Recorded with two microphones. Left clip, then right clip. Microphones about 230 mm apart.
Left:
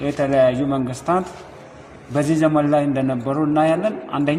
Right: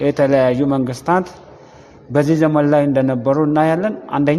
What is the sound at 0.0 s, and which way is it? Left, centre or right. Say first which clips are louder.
A man's voice: right 3 dB; right.